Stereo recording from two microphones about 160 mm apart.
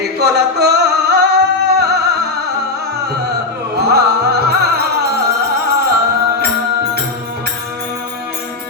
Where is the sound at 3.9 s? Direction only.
85° right.